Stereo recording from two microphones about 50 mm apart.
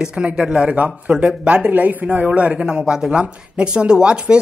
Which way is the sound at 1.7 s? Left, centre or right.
Right.